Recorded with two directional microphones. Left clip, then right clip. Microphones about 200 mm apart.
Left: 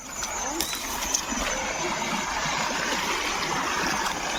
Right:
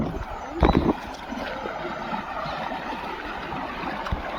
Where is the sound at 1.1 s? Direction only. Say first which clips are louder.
Left 5 dB; 10° left (ahead or behind).